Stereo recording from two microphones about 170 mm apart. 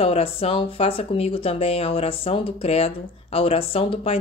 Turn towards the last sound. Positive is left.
turn(degrees=35)  # may be behind; listen again after turning